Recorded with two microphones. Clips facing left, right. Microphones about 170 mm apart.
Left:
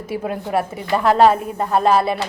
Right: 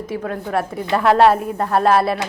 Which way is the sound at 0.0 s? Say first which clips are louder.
Even; 10° left (ahead or behind).